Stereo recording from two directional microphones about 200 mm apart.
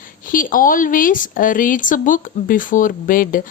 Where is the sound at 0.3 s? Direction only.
45° left (ahead or behind).